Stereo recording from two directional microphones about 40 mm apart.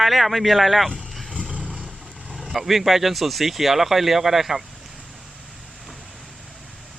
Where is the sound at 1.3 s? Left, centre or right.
Right.